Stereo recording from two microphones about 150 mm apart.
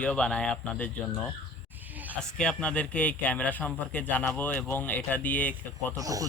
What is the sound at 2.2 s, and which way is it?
Speech, 5° left (ahead or behind).